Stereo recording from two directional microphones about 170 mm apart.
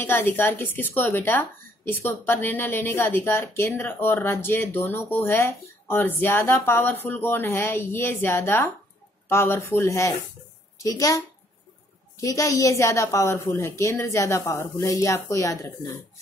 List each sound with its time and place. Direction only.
0.0 s a woman's voice: 15° left (ahead or behind)
12.2 s a woman's voice: 20° left (ahead or behind)